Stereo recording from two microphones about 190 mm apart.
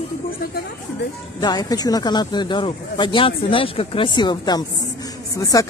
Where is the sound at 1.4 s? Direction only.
20° left (ahead or behind).